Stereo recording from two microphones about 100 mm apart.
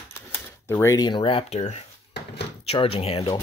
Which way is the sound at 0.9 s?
50° left (ahead or behind).